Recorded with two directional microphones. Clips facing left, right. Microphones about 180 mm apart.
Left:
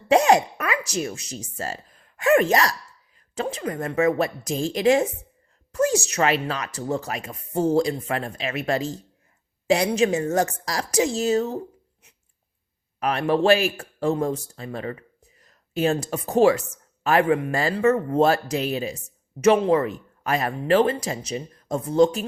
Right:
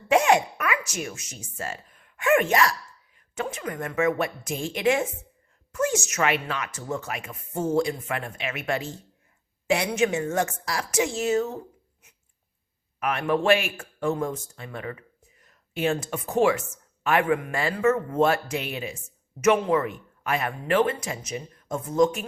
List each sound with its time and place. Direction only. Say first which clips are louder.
0.1 s speech: left 3 dB; 35° left (ahead or behind)
13.0 s speech: left 4 dB; 35° left (ahead or behind)